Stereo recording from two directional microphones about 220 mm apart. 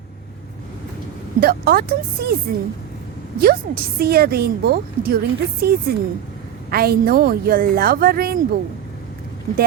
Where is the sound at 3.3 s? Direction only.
45° right (ahead or behind).